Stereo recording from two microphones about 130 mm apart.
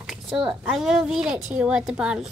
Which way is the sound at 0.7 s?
5° right (ahead or behind).